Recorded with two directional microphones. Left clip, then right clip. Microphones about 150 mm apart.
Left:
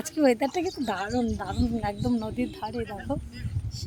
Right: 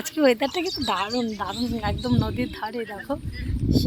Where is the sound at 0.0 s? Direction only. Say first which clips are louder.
Right 3 dB; centre (ahead or behind).